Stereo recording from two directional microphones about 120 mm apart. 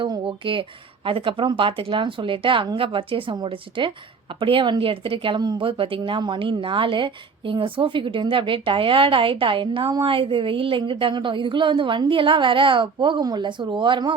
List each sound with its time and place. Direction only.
0.0 s speech: 45° right (ahead or behind)